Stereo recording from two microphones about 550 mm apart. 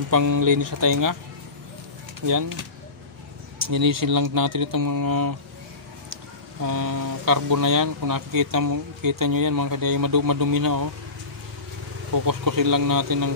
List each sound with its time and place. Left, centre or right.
0.1 s speech: right
2.2 s speech: right
3.6 s speech: right
6.6 s speech: right
12.1 s speech: right